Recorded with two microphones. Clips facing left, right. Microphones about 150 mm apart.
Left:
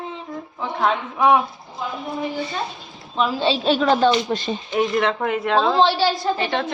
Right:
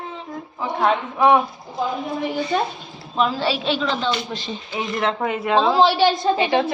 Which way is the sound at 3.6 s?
45° left (ahead or behind).